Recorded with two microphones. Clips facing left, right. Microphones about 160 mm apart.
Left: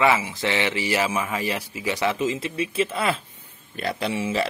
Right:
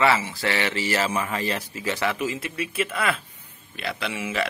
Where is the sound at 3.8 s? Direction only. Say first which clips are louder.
Left 4 dB; 40° left (ahead or behind).